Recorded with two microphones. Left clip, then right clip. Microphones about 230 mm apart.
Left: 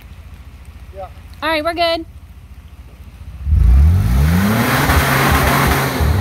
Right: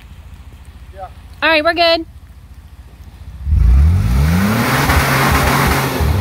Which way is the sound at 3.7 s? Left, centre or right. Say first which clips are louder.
Even; right.